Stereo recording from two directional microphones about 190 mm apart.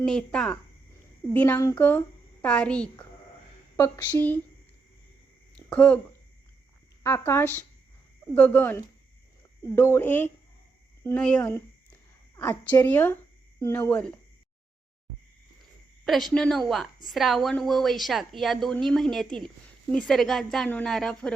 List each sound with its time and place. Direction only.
0.0 s a woman's voice: 5° left (ahead or behind)
3.8 s a woman's voice: 15° left (ahead or behind)
5.5 s a sound: 5° left (ahead or behind)
7.0 s a woman's voice: 15° left (ahead or behind)
16.0 s a woman's voice: centre (ahead or behind)